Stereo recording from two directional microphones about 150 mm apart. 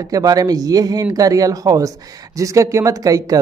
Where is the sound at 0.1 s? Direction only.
25° right (ahead or behind).